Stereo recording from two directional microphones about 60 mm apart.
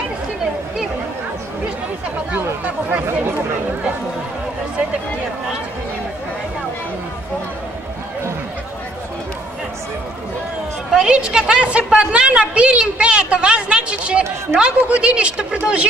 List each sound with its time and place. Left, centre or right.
10.9 s a woman's voice: centre
14.5 s a woman's voice: right
14.9 s a woman's voice: centre